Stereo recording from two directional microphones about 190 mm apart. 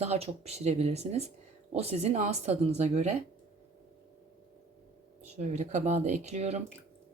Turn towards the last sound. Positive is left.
turn(degrees=-35)  # may be behind; listen again after turning